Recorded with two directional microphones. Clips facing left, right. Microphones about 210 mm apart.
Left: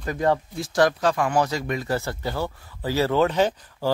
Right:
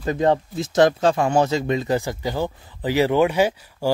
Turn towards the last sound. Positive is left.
turn(degrees=-10)  # may be behind; listen again after turning